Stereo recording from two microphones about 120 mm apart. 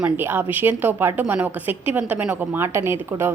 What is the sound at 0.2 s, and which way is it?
Speech, 15° right (ahead or behind).